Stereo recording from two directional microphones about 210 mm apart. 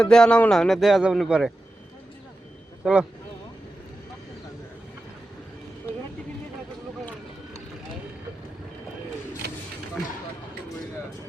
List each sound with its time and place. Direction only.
0.0 s a man's voice: 5° left (ahead or behind)
2.8 s a man's voice: 5° right (ahead or behind)
9.4 s a sound: 50° right (ahead or behind)